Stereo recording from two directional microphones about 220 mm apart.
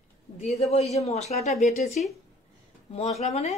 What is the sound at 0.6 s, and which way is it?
Speech, 30° left (ahead or behind).